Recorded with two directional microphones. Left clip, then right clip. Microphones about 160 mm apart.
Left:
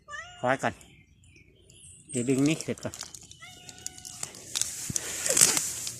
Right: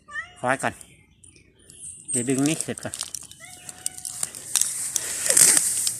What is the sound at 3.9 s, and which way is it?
Bird, 60° right (ahead or behind).